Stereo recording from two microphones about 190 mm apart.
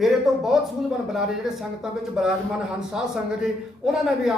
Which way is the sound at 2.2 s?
5° right (ahead or behind).